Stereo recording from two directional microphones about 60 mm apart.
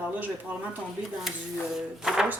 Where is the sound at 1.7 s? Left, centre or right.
Centre.